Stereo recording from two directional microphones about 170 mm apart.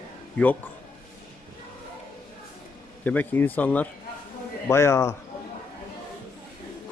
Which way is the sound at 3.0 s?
10° left (ahead or behind).